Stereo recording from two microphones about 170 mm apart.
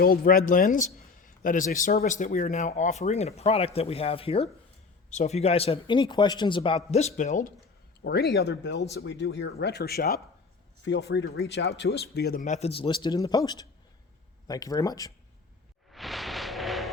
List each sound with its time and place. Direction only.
0.0 s a man's voice: 60° left (ahead or behind)
8.0 s speech: 75° left (ahead or behind)
10.8 s speech: 90° left; by 12.4 s 70° left (ahead or behind)
12.4 s a man's voice: 40° left (ahead or behind); by 15.1 s 20° left (ahead or behind)
15.9 s a sound: centre (ahead or behind)